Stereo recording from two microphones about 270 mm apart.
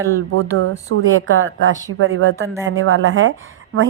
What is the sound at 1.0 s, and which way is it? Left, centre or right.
A woman's voice, right.